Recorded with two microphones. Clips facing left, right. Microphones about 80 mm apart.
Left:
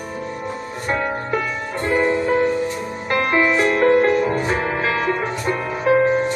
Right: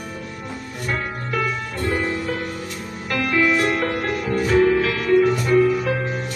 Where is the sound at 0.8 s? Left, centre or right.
Left.